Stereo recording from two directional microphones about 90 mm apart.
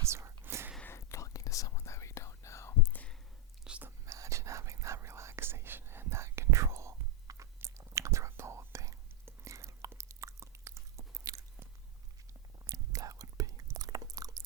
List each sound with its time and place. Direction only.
0.0 s whispering: 30° right (ahead or behind)
0.9 s whispering: 35° left (ahead or behind)
3.6 s whispering: 10° right (ahead or behind)
3.8 s whispering: 35° right (ahead or behind)
9.9 s chewing: 35° right (ahead or behind)
12.6 s whispering: 40° right (ahead or behind)
13.7 s chewing: 40° right (ahead or behind)